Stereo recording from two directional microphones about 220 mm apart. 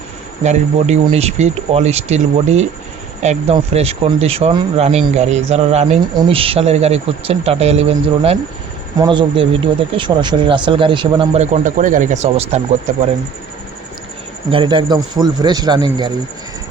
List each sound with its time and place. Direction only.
0.4 s speech: 30° right (ahead or behind)
14.5 s speech: 20° right (ahead or behind)